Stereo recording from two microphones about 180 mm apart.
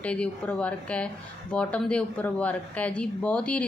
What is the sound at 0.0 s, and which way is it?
Speech, 5° left (ahead or behind).